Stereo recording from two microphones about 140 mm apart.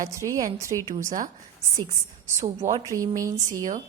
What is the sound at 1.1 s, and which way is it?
Speech, 65° right (ahead or behind).